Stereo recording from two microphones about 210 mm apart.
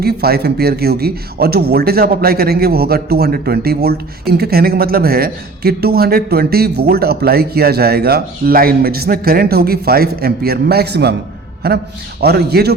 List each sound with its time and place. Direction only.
0.0 s speech: 50° right (ahead or behind)